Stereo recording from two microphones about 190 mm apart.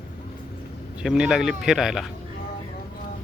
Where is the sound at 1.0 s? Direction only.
5° right (ahead or behind).